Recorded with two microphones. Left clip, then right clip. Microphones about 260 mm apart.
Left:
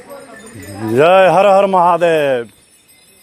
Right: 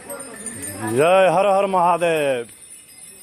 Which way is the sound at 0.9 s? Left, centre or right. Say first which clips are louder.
Left 6 dB; left.